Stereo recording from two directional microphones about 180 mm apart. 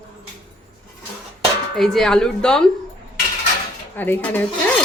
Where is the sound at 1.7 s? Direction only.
Centre (ahead or behind).